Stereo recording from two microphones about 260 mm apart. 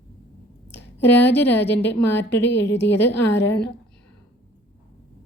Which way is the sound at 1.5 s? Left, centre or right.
Left.